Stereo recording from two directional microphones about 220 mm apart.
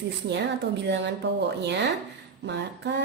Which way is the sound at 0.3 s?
50° right (ahead or behind).